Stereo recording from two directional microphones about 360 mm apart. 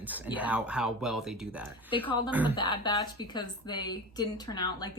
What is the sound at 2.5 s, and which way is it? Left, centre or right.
Speech, centre.